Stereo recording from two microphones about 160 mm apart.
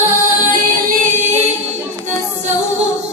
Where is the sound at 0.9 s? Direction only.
55° right (ahead or behind).